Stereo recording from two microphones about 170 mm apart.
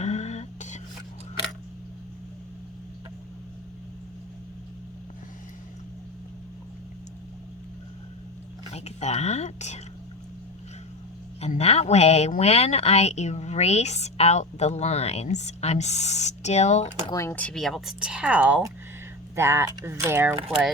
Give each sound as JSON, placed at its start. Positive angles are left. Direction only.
{"t": 0.0, "sound": "a sound", "side_deg": 40}
{"t": 8.7, "sound": "speech", "side_deg": 40}
{"t": 11.3, "sound": "a woman's voice", "side_deg": 40}
{"t": 17.1, "sound": "speech", "side_deg": 15}